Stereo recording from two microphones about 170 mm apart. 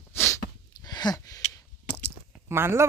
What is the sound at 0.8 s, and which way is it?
Sigh, 25° left (ahead or behind).